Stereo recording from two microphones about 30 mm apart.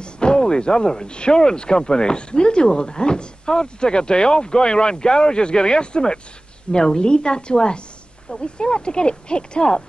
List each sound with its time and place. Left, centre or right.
0.0 s a woman's voice: left